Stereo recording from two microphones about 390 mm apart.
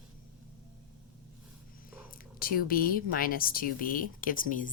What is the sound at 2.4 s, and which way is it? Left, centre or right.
Speech, left.